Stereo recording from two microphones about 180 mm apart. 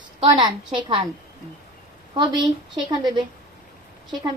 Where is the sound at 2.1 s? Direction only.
25° right (ahead or behind).